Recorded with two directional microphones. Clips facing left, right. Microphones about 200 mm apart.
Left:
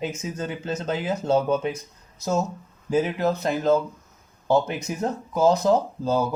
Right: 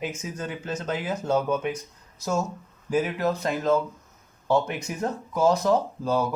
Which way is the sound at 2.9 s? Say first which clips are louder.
Left 2 dB; 25° left (ahead or behind).